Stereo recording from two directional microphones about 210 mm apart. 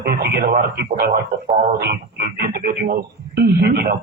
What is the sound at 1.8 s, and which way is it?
Speech, 45° right (ahead or behind).